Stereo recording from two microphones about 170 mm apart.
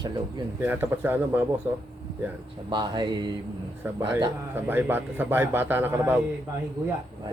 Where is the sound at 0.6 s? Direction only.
10° right (ahead or behind).